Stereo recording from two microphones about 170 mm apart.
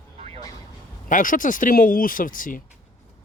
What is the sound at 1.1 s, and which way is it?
Speech, 50° left (ahead or behind).